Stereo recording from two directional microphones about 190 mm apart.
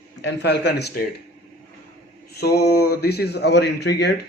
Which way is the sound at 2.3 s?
60° left (ahead or behind).